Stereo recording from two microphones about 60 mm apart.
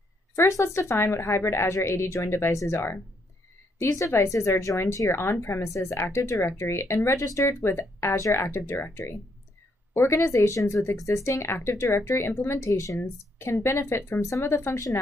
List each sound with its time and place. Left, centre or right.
0.4 s speech: left
4.1 s speech: left
4.5 s speech: left